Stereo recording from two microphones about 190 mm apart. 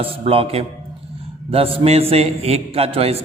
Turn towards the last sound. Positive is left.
turn(degrees=-30)  # may be behind; listen again after turning